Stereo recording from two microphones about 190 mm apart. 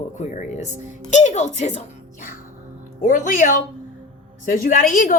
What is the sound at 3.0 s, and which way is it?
A woman's voice, 45° left (ahead or behind).